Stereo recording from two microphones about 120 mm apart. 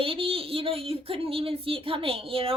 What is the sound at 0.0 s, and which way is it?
A woman's voice, 50° right (ahead or behind).